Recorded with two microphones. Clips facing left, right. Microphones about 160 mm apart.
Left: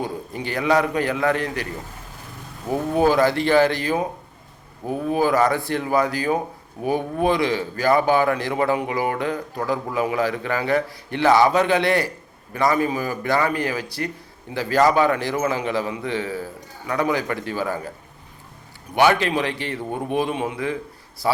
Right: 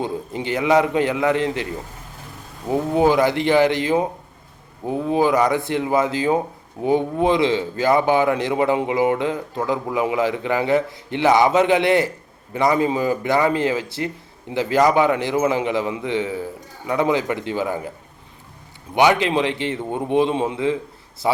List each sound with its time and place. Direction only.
0.0 s a man's voice: 20° right (ahead or behind)
2.6 s a man's voice: 20° right (ahead or behind)
18.9 s a man's voice: 20° right (ahead or behind)